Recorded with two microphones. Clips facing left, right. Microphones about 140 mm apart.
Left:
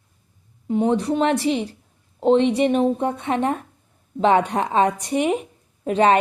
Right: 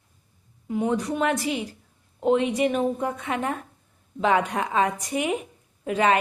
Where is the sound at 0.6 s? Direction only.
30° left (ahead or behind).